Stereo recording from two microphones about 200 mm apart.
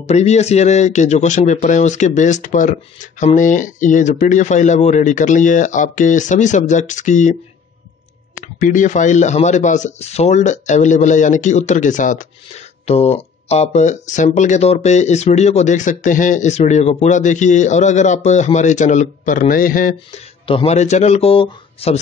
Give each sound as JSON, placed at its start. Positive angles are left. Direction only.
{"t": 0.0, "sound": "speech", "side_deg": 35}
{"t": 8.4, "sound": "speech", "side_deg": 40}
{"t": 20.4, "sound": "speech", "side_deg": 30}